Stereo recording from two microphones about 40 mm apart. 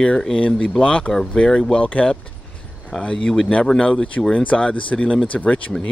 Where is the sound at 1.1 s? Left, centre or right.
Centre.